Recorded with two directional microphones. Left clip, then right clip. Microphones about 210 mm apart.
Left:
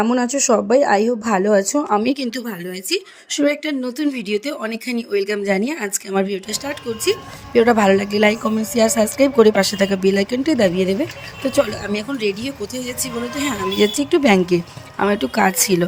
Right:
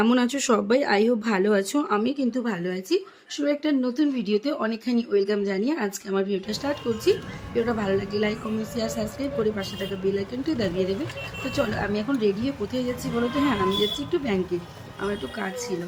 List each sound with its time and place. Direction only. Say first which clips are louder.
0.0 s speech: left 5 dB; centre (ahead or behind)
2.0 s speech: left 5 dB; 45° left (ahead or behind)
2.4 s a woman's voice: even; centre (ahead or behind)
2.9 s speech: left 6 dB; 40° left (ahead or behind)
13.7 s speech: left 8 dB; 45° left (ahead or behind)